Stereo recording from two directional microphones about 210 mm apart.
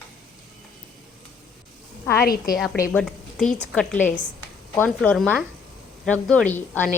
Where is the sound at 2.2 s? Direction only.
45° left (ahead or behind).